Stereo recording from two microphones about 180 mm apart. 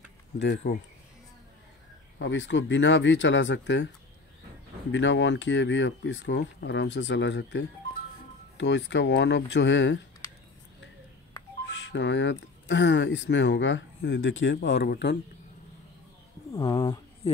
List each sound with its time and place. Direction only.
0.4 s speech: 70° left (ahead or behind)
2.1 s speech: 90° left
4.9 s speech: 90° left
11.7 s speech: 85° left; by 15.1 s 70° left (ahead or behind)
16.5 s speech: 20° left (ahead or behind)